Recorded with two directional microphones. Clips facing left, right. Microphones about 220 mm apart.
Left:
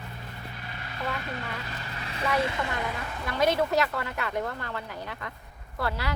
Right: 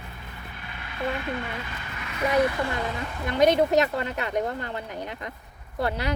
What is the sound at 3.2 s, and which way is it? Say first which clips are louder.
A woman's voice: right 5 dB; 20° right (ahead or behind).